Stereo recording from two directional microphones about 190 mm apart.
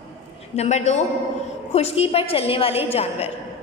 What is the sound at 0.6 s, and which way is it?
A woman's voice, 35° left (ahead or behind).